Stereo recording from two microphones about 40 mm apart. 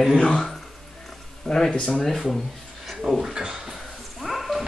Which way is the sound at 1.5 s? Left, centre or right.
Centre.